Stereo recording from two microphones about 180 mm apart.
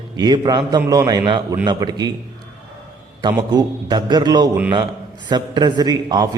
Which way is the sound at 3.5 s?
20° right (ahead or behind).